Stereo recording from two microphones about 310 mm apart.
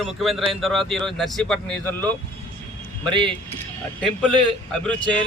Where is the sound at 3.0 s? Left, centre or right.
Centre.